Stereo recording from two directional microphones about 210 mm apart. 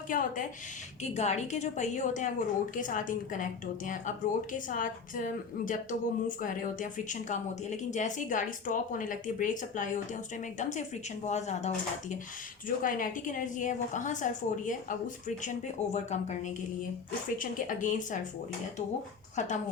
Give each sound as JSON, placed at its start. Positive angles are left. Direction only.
{"t": 0.1, "sound": "a woman's voice", "side_deg": 40}
{"t": 19.4, "sound": "a woman's voice", "side_deg": 35}